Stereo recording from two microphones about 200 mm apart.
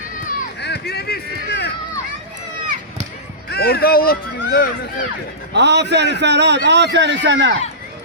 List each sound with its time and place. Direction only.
0.3 s a sound: 55° left (ahead or behind)
3.5 s speech: 55° left (ahead or behind)
5.5 s a man's voice: 60° right (ahead or behind)